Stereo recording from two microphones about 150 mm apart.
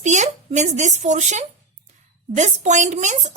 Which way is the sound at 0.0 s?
50° right (ahead or behind).